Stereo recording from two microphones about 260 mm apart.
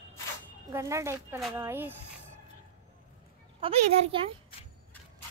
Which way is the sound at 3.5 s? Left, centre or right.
Centre.